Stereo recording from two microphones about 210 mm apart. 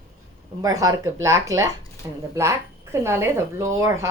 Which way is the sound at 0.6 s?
15° right (ahead or behind).